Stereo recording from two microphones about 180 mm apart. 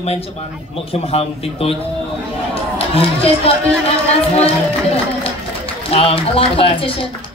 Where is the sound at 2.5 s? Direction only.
30° left (ahead or behind).